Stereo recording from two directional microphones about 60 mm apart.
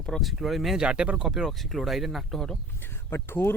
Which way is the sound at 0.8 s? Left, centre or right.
Centre.